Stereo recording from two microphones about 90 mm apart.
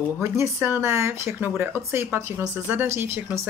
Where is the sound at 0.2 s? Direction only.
25° right (ahead or behind).